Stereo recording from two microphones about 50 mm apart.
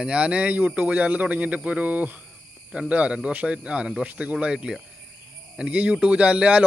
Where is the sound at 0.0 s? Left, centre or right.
Right.